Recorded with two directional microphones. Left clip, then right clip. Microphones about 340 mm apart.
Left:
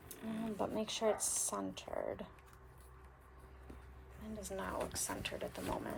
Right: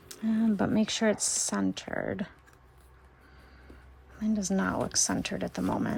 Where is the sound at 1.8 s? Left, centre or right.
Right.